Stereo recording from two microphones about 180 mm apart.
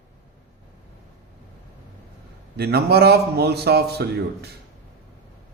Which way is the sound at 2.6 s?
65° right (ahead or behind).